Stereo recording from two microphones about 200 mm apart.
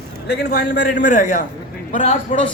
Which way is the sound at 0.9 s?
40° left (ahead or behind).